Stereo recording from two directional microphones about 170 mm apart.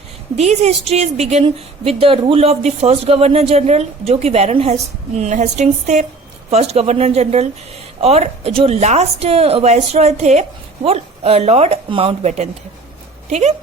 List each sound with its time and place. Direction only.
0.3 s a woman's voice: 40° right (ahead or behind)